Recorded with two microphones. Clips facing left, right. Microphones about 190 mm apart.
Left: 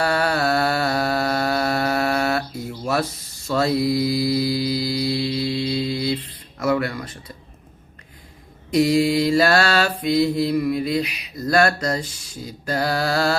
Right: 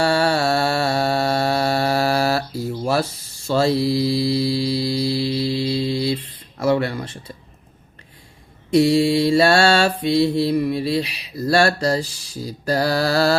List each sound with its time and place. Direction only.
0.0 s music: 30° right (ahead or behind)
6.6 s speech: 30° right (ahead or behind)
8.7 s mantra: 30° right (ahead or behind)